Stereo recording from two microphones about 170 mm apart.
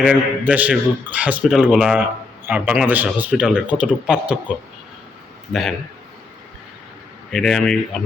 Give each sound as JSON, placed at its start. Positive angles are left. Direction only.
{"t": 0.0, "sound": "a man's voice", "side_deg": -10}
{"t": 7.3, "sound": "speech", "side_deg": 0}